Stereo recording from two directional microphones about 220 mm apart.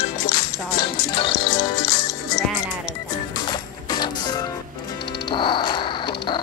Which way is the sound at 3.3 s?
20° left (ahead or behind).